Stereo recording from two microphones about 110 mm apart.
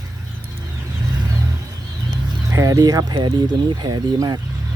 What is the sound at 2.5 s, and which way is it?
Speech, 35° right (ahead or behind).